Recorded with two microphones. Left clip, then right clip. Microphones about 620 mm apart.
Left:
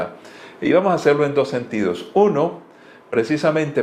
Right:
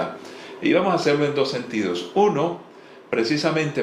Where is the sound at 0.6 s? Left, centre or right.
Left.